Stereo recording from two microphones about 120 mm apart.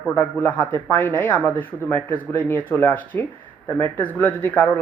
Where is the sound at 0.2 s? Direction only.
15° left (ahead or behind).